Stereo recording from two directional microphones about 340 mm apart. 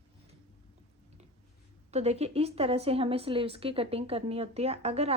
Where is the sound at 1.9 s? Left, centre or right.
Centre.